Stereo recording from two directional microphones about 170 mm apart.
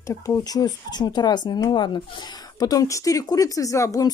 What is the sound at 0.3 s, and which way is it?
Speech, 20° left (ahead or behind).